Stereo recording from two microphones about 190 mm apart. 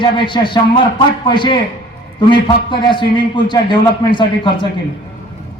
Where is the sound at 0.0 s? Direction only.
25° left (ahead or behind).